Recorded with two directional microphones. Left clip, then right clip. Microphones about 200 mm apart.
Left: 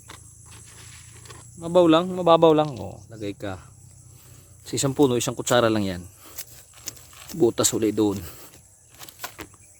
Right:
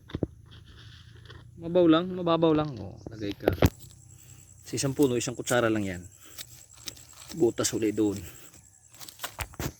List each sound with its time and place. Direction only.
0.1 s wild animals: 30° right (ahead or behind)
1.6 s a man's voice: 15° left (ahead or behind)
4.6 s speech: 15° left (ahead or behind)
6.8 s a sound: 10° right (ahead or behind)
7.4 s speech: 20° left (ahead or behind)
9.0 s a sound: 20° right (ahead or behind)